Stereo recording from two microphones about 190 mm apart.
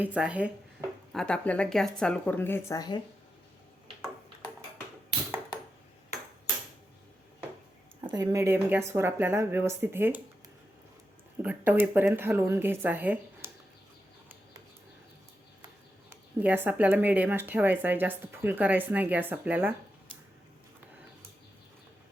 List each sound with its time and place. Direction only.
0.0 s speech: 5° right (ahead or behind)
0.8 s a sound: 15° right (ahead or behind)
1.1 s speech: 5° left (ahead or behind); by 3.0 s 20° left (ahead or behind)
8.0 s speech: 20° right (ahead or behind)
11.4 s speech: 10° right (ahead or behind)
16.0 s speech: 10° right (ahead or behind)